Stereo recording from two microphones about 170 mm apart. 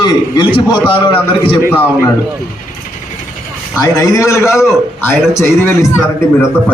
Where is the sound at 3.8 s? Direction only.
20° left (ahead or behind).